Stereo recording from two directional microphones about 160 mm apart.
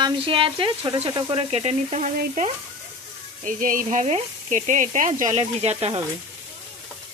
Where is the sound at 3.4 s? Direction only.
55° right (ahead or behind); by 6.0 s 40° right (ahead or behind).